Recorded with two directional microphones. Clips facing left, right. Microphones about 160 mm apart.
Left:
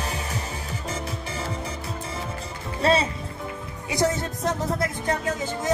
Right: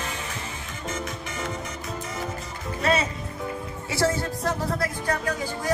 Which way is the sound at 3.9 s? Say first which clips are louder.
Left 1 dB; 20° left (ahead or behind).